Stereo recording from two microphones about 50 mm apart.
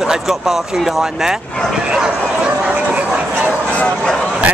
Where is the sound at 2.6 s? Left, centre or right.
Right.